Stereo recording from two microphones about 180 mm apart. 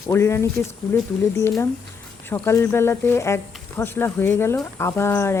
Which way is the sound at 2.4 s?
15° left (ahead or behind).